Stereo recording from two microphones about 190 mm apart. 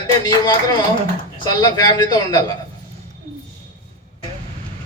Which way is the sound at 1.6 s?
20° left (ahead or behind).